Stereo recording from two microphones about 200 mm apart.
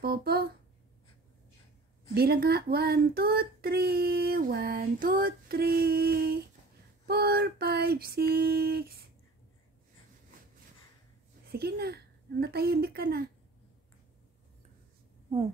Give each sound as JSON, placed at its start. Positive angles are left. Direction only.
{"t": 0.0, "sound": "a sound", "side_deg": -50}
{"t": 2.1, "sound": "speech", "side_deg": -50}
{"t": 11.4, "sound": "speech", "side_deg": -50}